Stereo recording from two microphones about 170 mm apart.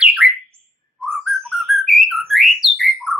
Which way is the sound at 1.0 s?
Centre (ahead or behind).